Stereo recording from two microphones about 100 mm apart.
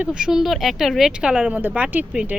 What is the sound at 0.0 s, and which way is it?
Speech, 10° right (ahead or behind).